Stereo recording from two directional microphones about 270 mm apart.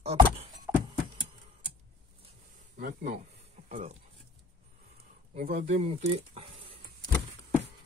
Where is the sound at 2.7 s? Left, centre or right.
Right.